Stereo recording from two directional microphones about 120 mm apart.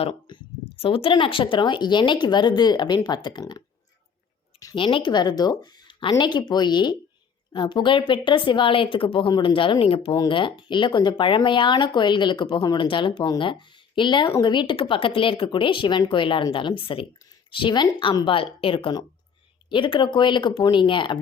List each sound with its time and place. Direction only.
0.0 s speech: 45° left (ahead or behind)
4.7 s speech: 45° left (ahead or behind)
10.1 s speech: 40° left (ahead or behind)